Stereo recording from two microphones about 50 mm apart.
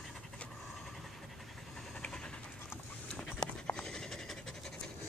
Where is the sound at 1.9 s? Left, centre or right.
Centre.